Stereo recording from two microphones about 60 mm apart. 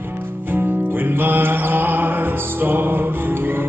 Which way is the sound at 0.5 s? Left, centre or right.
Right.